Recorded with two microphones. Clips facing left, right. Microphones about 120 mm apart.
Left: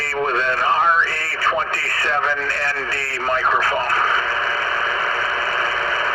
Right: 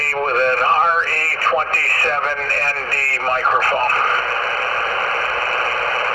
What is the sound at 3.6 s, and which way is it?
Radio, 50° right (ahead or behind).